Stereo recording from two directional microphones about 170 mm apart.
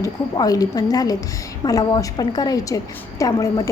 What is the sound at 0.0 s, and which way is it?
A woman's voice, 20° left (ahead or behind).